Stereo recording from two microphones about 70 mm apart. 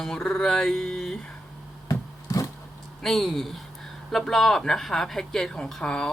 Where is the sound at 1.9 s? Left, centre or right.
Left.